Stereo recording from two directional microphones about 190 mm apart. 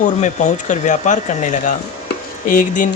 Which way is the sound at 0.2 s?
40° left (ahead or behind).